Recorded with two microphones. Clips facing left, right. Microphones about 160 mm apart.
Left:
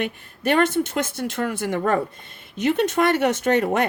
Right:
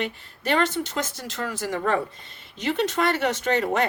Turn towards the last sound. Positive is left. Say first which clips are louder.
# left 3 dB
turn(degrees=55)  # may be behind; listen again after turning